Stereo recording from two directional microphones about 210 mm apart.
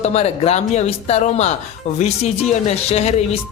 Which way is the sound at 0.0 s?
30° left (ahead or behind).